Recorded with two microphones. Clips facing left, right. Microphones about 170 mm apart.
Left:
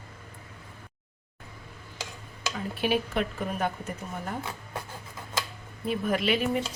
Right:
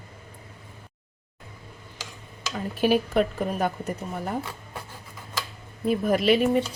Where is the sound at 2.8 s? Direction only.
40° right (ahead or behind).